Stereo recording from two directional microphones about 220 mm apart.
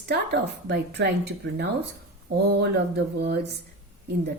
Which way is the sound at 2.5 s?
50° right (ahead or behind).